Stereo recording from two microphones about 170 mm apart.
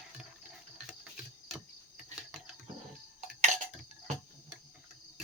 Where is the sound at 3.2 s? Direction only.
45° right (ahead or behind).